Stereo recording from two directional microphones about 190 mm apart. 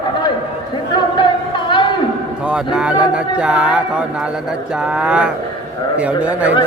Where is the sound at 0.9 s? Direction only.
25° left (ahead or behind).